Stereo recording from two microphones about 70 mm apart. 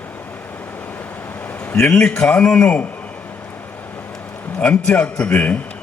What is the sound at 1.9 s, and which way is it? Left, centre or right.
Speech, centre.